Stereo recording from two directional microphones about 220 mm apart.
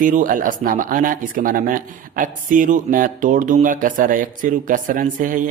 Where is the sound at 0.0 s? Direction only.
35° right (ahead or behind).